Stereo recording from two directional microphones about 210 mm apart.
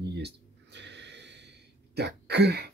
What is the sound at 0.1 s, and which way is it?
Gasp, 55° right (ahead or behind).